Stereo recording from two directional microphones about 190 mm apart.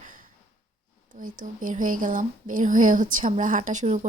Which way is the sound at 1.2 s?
45° right (ahead or behind).